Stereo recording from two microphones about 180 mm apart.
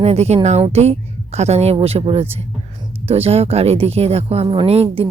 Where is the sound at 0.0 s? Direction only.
35° right (ahead or behind).